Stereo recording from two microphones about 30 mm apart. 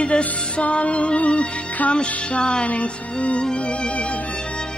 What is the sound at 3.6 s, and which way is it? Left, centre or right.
Music, left.